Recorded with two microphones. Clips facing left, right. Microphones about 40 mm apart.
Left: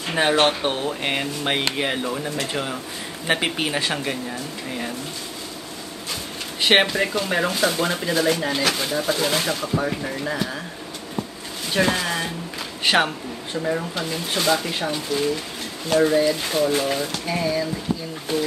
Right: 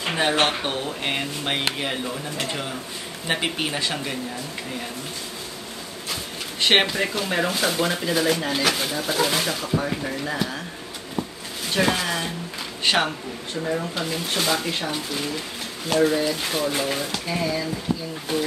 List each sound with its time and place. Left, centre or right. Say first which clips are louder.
0.1 s speech: left 3 dB; centre
6.6 s speech: left 2 dB; centre
11.7 s speech: left 1 dB; centre
12.8 s speech: left 2 dB; centre
14.0 s speech: left 4 dB; centre
17.9 s a sound: even; left